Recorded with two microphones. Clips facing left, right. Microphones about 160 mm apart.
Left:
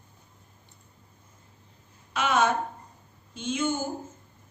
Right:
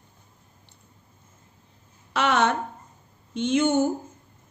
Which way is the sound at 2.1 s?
70° right (ahead or behind).